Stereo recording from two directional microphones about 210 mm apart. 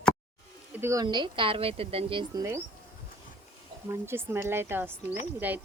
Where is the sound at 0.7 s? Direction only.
10° right (ahead or behind).